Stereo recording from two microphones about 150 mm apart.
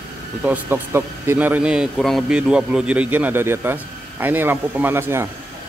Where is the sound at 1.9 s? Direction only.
Centre (ahead or behind); by 5.3 s 15° right (ahead or behind).